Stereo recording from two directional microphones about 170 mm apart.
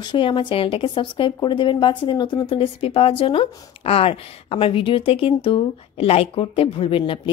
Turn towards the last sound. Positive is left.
turn(degrees=30)  # may be behind; listen again after turning